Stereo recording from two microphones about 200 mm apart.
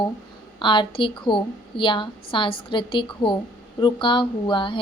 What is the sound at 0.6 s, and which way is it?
Speech, 25° left (ahead or behind).